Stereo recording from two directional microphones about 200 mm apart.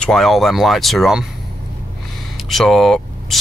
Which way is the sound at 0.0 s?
Centre (ahead or behind).